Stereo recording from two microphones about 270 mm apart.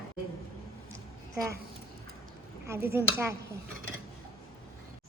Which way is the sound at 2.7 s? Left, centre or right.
Centre.